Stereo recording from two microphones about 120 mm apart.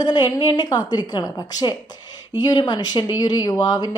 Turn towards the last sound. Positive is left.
turn(degrees=35)  # may be behind; listen again after turning